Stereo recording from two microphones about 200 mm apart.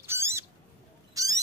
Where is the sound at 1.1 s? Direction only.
15° right (ahead or behind).